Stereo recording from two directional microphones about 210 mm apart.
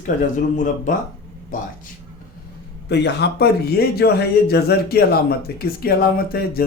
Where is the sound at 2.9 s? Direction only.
55° left (ahead or behind).